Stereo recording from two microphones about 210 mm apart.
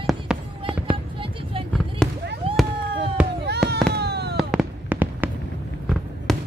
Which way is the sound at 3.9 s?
50° right (ahead or behind).